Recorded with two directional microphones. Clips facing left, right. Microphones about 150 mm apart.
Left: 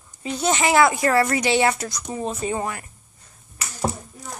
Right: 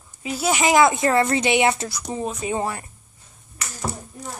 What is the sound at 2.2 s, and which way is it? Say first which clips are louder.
Speech: left 3 dB; centre (ahead or behind).